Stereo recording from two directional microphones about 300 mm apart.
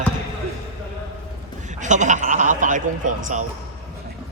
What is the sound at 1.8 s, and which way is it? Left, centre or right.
A man's voice, right.